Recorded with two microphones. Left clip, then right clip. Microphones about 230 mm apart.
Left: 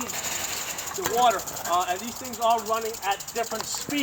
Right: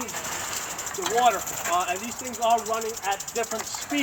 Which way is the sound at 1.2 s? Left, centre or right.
Centre.